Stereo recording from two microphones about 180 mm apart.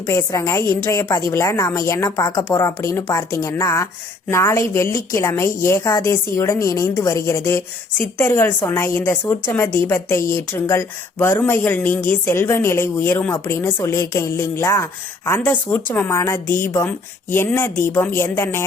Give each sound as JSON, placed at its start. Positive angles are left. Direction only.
{"t": 0.0, "sound": "speech", "side_deg": 15}